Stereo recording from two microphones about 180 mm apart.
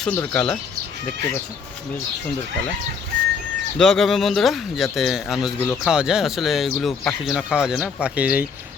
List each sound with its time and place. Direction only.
0.0 s speech: 10° left (ahead or behind)
3.8 s speech: centre (ahead or behind)